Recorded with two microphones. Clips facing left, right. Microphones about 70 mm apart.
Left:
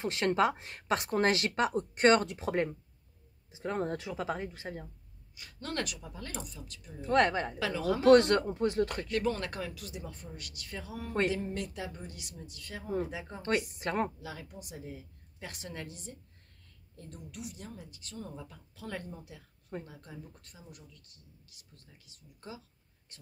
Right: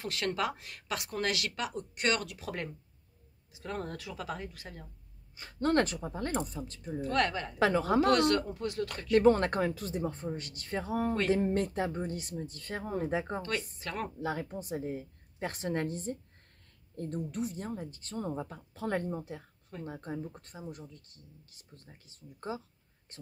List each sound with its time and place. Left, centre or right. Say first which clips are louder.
0.0 s speech: left 5 dB; left
5.3 s a woman's voice: right 11 dB; right
7.0 s speech: left 4 dB; left
7.5 s speech: right 5 dB; right
8.1 s speech: left 5 dB; left
9.1 s speech: right 8 dB; right
13.7 s speech: left 5 dB; left
14.2 s speech: right 9 dB; right